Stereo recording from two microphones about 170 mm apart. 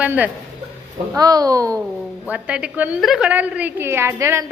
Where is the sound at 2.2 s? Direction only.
5° right (ahead or behind).